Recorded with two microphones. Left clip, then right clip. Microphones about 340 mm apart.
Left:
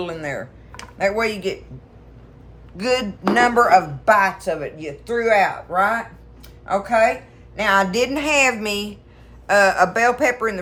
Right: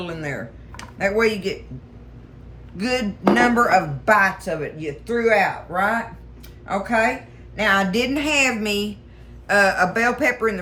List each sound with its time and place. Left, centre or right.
0.0 s speech: centre
2.7 s speech: centre